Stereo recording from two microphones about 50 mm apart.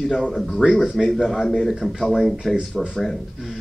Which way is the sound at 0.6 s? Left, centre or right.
Centre.